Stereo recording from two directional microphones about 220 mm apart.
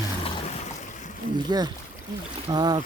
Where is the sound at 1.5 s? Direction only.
20° right (ahead or behind).